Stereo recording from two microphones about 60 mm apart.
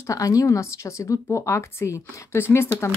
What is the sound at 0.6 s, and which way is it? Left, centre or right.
A woman's voice, left.